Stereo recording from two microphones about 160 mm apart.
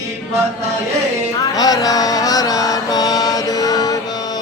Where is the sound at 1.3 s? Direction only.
25° left (ahead or behind).